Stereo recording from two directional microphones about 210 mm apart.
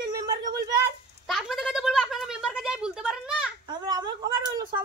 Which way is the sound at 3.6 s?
20° right (ahead or behind).